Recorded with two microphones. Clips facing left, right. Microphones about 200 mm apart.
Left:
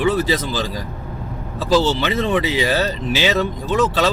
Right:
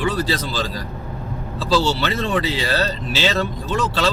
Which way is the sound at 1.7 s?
15° left (ahead or behind).